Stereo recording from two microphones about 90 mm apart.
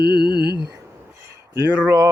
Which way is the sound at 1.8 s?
30° right (ahead or behind).